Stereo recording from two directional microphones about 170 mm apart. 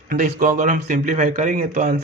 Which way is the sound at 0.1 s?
50° right (ahead or behind).